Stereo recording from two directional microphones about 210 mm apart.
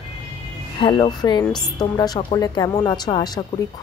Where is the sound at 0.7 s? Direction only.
20° left (ahead or behind).